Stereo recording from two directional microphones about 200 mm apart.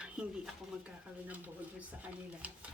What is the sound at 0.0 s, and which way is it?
A woman's voice, 5° right (ahead or behind).